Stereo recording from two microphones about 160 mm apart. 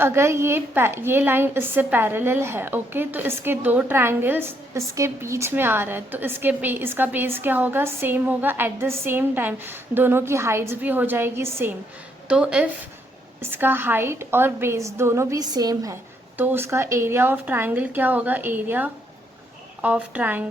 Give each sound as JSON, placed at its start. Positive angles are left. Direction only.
{"t": 0.0, "sound": "a woman's voice", "side_deg": -15}